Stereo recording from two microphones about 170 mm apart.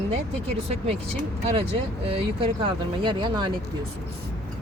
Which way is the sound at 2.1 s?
35° right (ahead or behind).